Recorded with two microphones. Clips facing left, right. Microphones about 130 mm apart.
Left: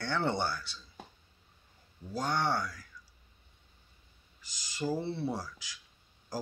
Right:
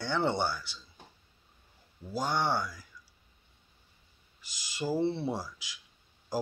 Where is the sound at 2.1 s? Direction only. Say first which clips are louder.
Right 1 dB; 10° right (ahead or behind).